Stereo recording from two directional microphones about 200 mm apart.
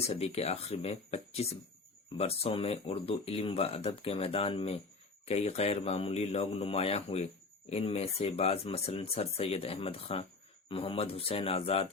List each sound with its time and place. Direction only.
0.0 s a man's voice: 30° left (ahead or behind)